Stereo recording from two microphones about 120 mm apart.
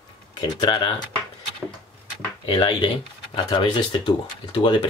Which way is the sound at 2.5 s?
40° left (ahead or behind).